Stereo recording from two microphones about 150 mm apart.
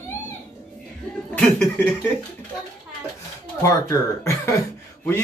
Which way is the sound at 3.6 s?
20° left (ahead or behind).